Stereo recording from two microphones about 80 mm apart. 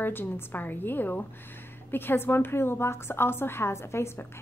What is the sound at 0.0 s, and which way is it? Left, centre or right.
A woman's voice, left.